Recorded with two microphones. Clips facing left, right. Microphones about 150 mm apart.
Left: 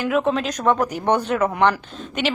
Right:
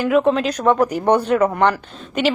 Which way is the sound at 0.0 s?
Centre (ahead or behind).